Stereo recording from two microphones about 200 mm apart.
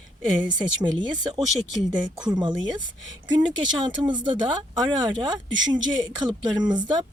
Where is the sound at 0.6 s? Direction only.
20° right (ahead or behind).